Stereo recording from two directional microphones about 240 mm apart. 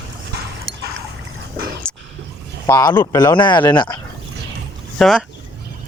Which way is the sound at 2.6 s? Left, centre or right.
Centre.